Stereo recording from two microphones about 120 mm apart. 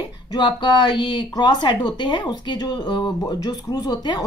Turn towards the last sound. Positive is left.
turn(degrees=35)  # may be behind; listen again after turning